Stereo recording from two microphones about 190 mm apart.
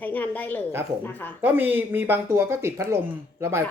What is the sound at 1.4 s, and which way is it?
Speech, 10° right (ahead or behind).